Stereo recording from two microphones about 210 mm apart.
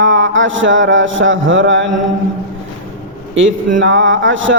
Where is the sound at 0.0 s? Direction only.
65° right (ahead or behind).